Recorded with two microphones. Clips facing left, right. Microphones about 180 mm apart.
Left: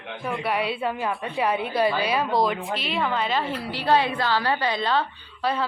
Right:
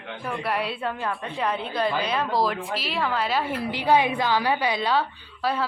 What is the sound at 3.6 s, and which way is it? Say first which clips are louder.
A woman's voice: right 2 dB; 15° right (ahead or behind).